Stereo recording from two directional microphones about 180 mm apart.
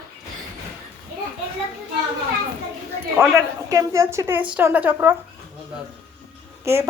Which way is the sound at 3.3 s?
15° right (ahead or behind).